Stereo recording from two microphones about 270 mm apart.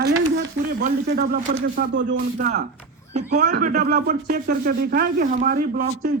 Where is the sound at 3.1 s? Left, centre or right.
Right.